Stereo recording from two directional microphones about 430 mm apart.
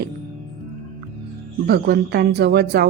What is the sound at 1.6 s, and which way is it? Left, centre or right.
Speech, right.